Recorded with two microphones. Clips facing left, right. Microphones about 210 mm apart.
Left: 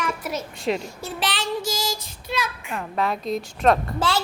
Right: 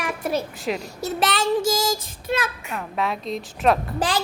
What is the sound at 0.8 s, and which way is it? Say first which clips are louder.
Child singing: right 4 dB; 40° right (ahead or behind).